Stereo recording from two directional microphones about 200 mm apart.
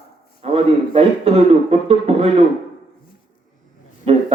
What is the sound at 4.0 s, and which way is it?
Speech, 30° right (ahead or behind).